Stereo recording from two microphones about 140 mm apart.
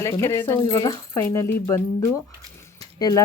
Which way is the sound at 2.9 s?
25° left (ahead or behind).